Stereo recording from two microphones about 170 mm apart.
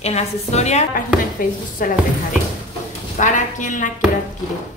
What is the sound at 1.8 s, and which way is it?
Speech, 55° left (ahead or behind).